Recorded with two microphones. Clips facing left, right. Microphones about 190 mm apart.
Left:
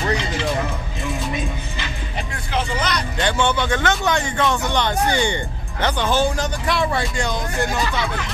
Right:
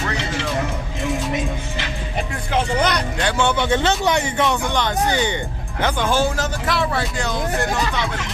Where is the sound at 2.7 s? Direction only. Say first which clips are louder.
Right 6 dB; 60° right (ahead or behind).